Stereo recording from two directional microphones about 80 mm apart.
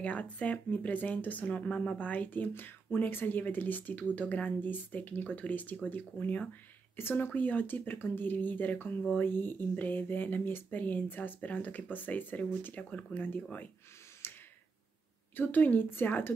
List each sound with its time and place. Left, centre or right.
0.0 s speech: centre
7.0 s speech: left
14.2 s tick-tock: left
15.3 s speech: left